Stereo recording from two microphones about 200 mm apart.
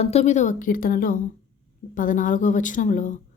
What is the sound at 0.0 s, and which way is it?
A woman's voice, 30° left (ahead or behind).